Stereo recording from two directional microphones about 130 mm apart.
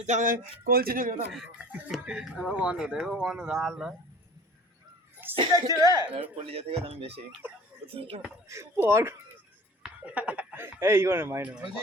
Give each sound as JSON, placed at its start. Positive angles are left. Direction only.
{"t": 0.0, "sound": "speech", "side_deg": -75}
{"t": 1.9, "sound": "speech", "side_deg": 0}
{"t": 5.2, "sound": "a sound", "side_deg": -15}
{"t": 5.5, "sound": "speech", "side_deg": -25}
{"t": 6.3, "sound": "speech", "side_deg": -50}
{"t": 8.4, "sound": "speech", "side_deg": -20}